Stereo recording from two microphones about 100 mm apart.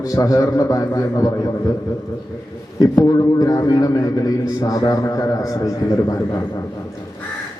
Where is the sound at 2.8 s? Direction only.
40° left (ahead or behind).